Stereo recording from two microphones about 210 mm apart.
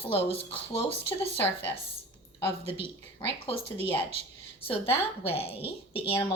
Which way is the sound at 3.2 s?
20° left (ahead or behind).